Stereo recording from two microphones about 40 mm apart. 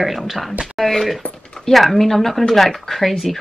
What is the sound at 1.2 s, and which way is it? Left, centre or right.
Speech, left.